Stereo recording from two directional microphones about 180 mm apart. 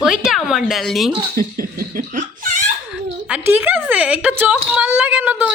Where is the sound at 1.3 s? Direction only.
55° right (ahead or behind).